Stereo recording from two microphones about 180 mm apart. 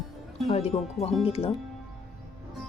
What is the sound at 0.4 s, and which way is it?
Speech, 35° left (ahead or behind).